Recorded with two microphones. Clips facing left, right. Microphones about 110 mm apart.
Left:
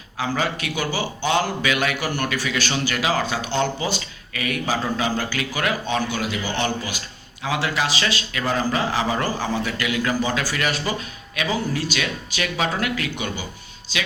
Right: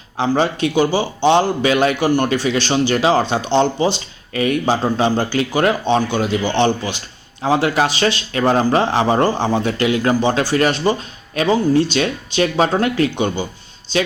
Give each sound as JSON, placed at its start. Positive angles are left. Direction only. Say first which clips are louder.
{"t": 0.2, "sound": "speech", "louder": "right 8 dB", "side_deg": -30}
{"t": 2.0, "sound": "a man's voice", "louder": "right 9 dB", "side_deg": -20}
{"t": 8.8, "sound": "a man's voice", "louder": "right 7 dB", "side_deg": -30}